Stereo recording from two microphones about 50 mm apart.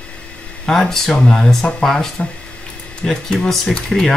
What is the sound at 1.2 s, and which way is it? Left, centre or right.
Speech, left.